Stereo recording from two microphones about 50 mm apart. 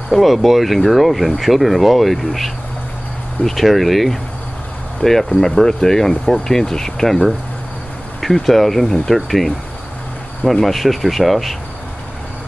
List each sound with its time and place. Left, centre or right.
0.1 s speech: centre
5.0 s speech: centre